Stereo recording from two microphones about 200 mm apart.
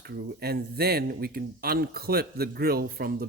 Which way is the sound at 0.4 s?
50° right (ahead or behind).